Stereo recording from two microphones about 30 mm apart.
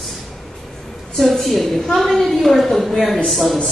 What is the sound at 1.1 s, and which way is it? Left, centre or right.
A woman's voice, centre.